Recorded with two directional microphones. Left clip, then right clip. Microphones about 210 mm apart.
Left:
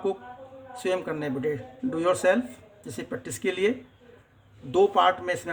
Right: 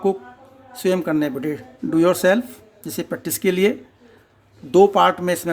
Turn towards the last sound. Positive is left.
turn(degrees=-55)  # may be behind; listen again after turning